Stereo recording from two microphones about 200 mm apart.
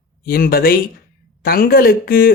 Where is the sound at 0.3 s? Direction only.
45° left (ahead or behind).